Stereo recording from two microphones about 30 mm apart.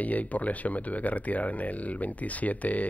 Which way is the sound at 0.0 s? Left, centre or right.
Left.